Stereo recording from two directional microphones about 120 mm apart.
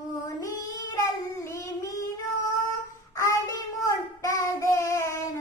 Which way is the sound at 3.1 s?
25° left (ahead or behind).